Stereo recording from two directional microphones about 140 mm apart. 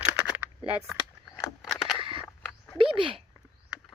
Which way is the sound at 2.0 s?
40° right (ahead or behind).